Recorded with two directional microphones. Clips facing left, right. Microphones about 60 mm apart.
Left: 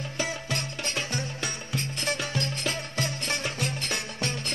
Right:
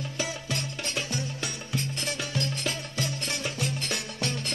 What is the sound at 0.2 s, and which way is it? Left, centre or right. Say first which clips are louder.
Music: left 2 dB; left.